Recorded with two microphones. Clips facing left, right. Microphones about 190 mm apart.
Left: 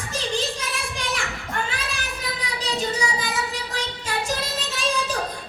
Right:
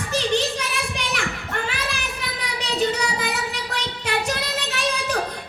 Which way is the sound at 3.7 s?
65° right (ahead or behind).